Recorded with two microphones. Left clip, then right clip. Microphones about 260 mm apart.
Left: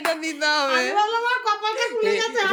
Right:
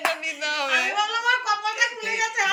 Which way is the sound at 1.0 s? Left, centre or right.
Left.